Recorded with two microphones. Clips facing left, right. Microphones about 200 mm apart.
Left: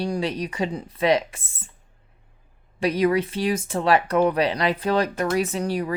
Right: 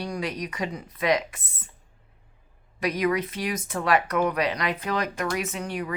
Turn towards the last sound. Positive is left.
turn(degrees=35)  # may be behind; listen again after turning